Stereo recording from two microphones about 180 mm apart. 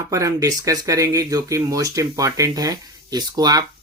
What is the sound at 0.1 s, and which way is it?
Speech, 20° right (ahead or behind).